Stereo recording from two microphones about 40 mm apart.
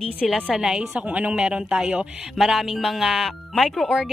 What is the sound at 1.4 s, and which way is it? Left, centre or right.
Music, centre.